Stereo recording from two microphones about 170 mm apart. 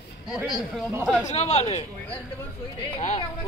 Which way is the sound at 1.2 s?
40° left (ahead or behind).